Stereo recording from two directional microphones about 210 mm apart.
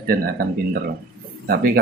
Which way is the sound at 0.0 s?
45° right (ahead or behind).